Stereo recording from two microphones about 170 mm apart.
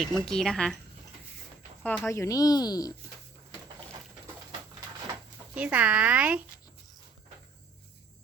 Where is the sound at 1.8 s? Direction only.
10° left (ahead or behind).